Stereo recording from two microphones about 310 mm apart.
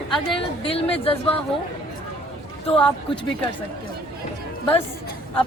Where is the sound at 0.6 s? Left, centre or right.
Centre.